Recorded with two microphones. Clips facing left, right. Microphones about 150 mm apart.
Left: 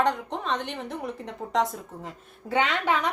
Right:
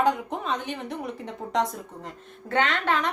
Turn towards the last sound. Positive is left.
turn(degrees=10)  # may be behind; listen again after turning